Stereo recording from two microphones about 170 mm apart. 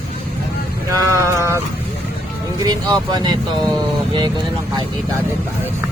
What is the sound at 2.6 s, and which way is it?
Speech, 25° right (ahead or behind).